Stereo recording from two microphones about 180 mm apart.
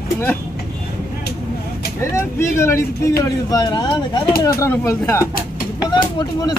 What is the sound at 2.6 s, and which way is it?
Speech, 15° left (ahead or behind).